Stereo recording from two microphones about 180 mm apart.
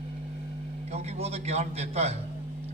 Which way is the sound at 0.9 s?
35° right (ahead or behind).